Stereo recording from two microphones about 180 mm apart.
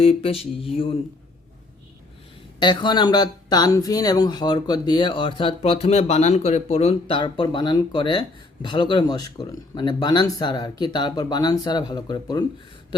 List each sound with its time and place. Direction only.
0.0 s mantra: 35° left (ahead or behind)
2.6 s speech: 25° left (ahead or behind)